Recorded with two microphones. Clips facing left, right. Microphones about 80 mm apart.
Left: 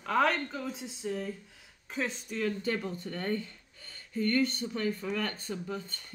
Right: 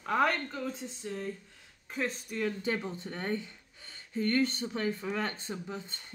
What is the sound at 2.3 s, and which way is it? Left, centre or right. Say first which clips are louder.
Speech: left 1 dB; centre.